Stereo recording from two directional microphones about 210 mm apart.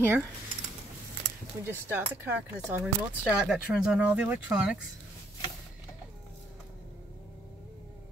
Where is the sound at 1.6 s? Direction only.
10° right (ahead or behind).